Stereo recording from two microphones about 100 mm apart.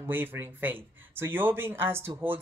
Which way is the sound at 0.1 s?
20° right (ahead or behind).